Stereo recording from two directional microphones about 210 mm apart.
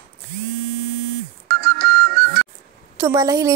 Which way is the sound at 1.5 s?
50° right (ahead or behind).